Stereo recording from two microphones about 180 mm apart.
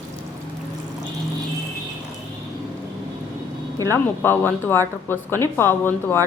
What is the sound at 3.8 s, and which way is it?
Speech, 15° left (ahead or behind).